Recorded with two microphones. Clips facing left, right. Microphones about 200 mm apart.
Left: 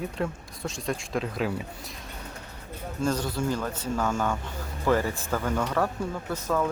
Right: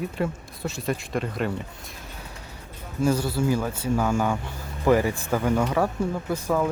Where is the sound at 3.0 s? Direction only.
10° right (ahead or behind).